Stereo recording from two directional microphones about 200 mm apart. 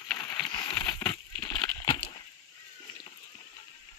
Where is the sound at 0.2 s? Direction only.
20° left (ahead or behind).